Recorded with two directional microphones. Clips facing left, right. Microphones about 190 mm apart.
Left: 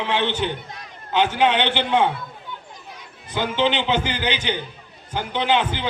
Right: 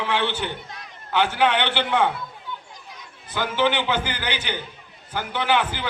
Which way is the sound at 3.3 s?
20° left (ahead or behind).